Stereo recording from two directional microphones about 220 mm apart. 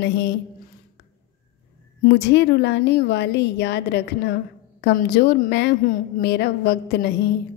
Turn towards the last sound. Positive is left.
turn(degrees=50)  # may be behind; listen again after turning